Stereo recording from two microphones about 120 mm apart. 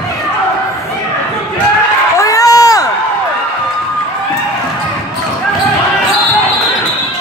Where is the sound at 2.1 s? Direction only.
30° left (ahead or behind).